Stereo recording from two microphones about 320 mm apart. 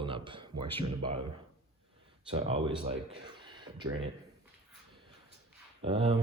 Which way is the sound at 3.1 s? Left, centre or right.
Centre.